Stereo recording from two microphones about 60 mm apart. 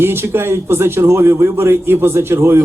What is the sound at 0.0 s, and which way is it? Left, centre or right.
A man's voice, right.